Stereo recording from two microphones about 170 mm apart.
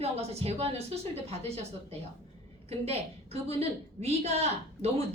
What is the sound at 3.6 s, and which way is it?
A woman's voice, 35° right (ahead or behind).